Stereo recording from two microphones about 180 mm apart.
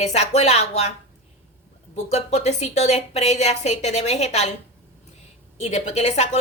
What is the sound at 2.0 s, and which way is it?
Speech, 35° left (ahead or behind).